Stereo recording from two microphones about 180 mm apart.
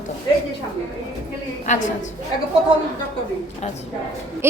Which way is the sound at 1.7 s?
45° left (ahead or behind).